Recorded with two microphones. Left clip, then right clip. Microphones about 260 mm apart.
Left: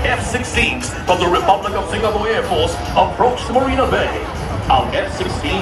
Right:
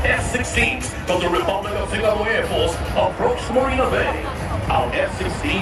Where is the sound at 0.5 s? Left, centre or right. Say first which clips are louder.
Left 3 dB; centre.